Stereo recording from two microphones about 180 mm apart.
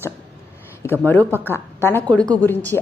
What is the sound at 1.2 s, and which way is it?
Speech, 10° right (ahead or behind).